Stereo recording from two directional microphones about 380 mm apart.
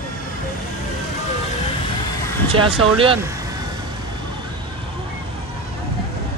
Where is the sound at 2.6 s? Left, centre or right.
Centre.